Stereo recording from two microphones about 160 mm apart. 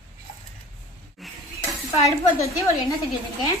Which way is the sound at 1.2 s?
Centre (ahead or behind).